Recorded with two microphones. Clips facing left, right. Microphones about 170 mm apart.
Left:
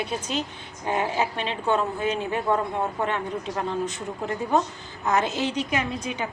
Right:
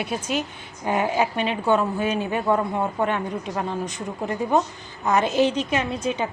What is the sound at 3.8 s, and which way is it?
A woman's voice, 15° right (ahead or behind).